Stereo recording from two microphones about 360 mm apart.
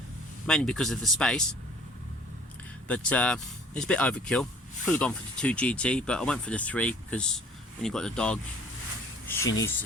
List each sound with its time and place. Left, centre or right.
0.4 s speech: centre
2.8 s speech: centre
9.4 s speech: left